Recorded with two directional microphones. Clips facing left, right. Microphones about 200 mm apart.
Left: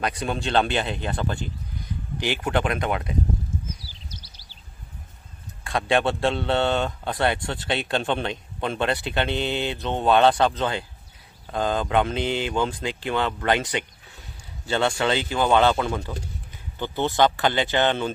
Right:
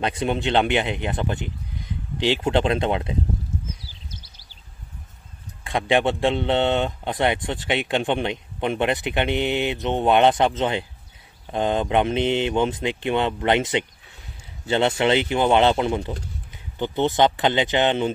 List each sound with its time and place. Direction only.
0.0 s speech: 25° right (ahead or behind)
4.1 s a sound: 50° right (ahead or behind)
5.6 s speech: 20° right (ahead or behind)